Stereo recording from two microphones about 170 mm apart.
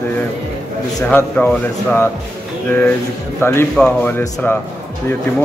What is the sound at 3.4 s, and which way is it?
Speech, 15° left (ahead or behind).